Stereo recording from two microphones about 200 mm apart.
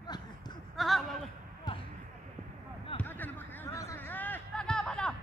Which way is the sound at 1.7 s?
20° left (ahead or behind).